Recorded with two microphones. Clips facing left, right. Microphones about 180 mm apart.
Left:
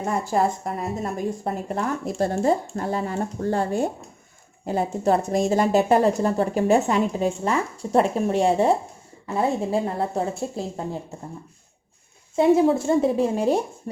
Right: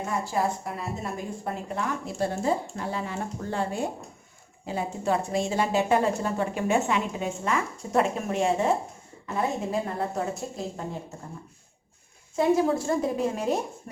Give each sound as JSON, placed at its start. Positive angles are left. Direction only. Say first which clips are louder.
{"t": 0.0, "sound": "a woman's voice", "louder": "left 5 dB", "side_deg": 45}
{"t": 12.4, "sound": "a woman's voice", "louder": "left 5 dB", "side_deg": 25}